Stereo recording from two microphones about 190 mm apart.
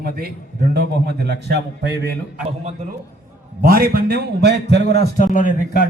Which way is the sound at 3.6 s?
50° right (ahead or behind).